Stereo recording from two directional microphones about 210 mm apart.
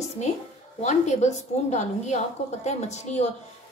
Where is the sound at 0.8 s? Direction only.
35° left (ahead or behind).